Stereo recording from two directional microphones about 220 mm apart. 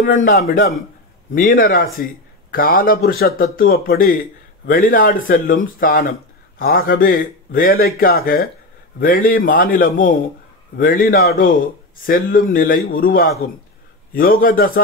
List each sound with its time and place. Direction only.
0.2 s a man's voice: 40° left (ahead or behind)